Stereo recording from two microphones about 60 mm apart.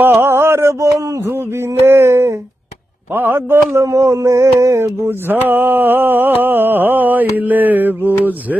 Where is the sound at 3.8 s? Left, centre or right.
Right.